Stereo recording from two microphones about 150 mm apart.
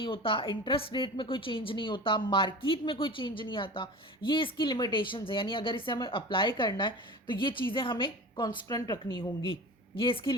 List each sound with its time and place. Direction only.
0.0 s a woman's voice: 35° left (ahead or behind)